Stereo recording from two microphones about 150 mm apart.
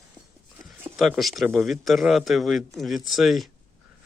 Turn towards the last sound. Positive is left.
turn(degrees=0)  # may be behind; listen again after turning